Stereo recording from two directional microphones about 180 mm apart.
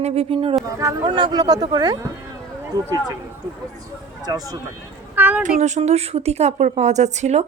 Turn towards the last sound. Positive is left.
turn(degrees=-40)  # may be behind; listen again after turning